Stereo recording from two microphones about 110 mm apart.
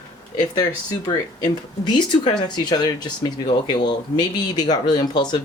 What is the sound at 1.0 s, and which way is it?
Speech, 35° left (ahead or behind).